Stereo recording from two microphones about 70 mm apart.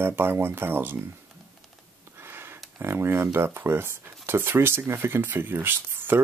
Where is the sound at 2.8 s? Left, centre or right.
Right.